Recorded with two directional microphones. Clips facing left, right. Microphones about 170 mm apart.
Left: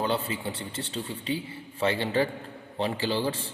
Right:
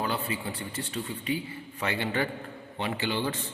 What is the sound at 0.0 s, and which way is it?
A man's voice, 25° left (ahead or behind).